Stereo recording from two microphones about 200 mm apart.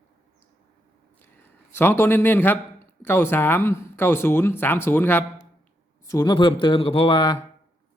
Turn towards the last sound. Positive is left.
turn(degrees=25)  # may be behind; listen again after turning